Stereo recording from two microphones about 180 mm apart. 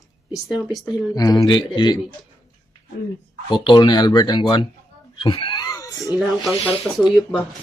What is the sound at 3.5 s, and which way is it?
A man's voice, 25° left (ahead or behind).